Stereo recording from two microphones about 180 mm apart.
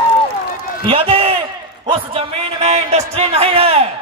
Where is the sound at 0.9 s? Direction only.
30° right (ahead or behind).